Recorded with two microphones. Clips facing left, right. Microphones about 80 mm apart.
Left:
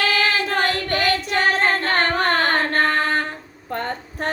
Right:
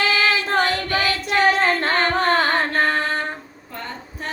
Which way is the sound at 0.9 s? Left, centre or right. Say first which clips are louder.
Left 1 dB; left.